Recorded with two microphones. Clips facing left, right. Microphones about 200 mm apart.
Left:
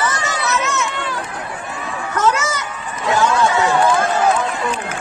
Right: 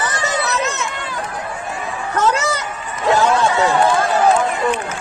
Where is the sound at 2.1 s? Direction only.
35° right (ahead or behind).